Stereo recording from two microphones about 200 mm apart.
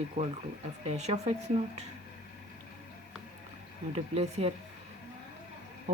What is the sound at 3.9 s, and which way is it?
Speech, 30° right (ahead or behind).